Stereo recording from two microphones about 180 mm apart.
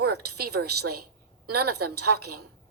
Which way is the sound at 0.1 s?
60° right (ahead or behind).